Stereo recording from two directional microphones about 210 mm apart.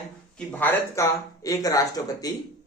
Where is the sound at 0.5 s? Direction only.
10° left (ahead or behind).